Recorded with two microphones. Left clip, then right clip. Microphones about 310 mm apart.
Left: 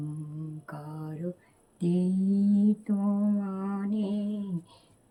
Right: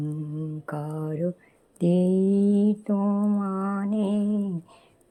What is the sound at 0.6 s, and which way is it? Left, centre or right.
Mantra, centre.